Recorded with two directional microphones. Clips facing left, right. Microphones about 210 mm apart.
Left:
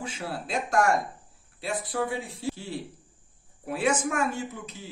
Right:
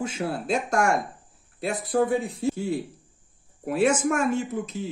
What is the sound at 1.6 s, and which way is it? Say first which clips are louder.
Speech: right 6 dB; 50° right (ahead or behind).